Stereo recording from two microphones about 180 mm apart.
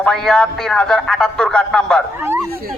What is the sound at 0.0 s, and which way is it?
A man's voice, 5° left (ahead or behind).